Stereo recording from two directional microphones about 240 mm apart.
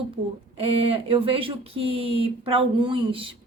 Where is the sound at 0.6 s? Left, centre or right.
Right.